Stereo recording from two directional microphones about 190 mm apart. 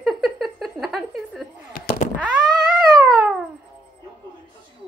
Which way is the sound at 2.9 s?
20° right (ahead or behind).